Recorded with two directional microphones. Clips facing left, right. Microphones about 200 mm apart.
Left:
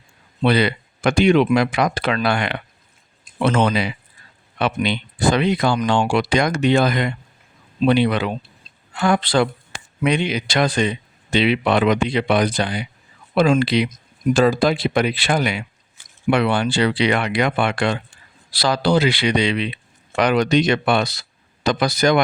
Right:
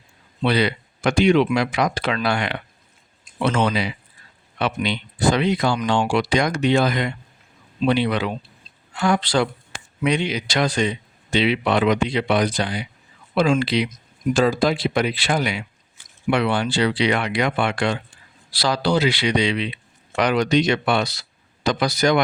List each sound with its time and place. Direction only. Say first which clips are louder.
0.4 s speech: left 3 dB; 55° left (ahead or behind)